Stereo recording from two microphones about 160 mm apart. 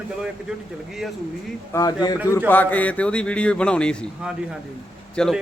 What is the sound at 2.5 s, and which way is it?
A man's voice, 10° left (ahead or behind).